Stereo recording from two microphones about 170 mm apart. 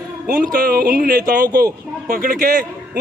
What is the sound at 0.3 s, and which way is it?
A man's voice, 55° right (ahead or behind).